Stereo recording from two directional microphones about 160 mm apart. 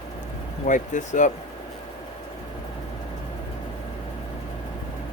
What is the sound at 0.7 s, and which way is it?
Speech, 50° left (ahead or behind).